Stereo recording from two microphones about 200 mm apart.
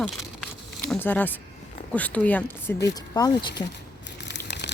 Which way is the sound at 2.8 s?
20° left (ahead or behind).